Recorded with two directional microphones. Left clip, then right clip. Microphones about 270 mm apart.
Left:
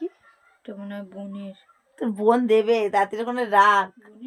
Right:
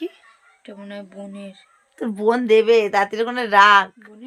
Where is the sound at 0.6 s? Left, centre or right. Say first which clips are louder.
Right 1 dB; centre.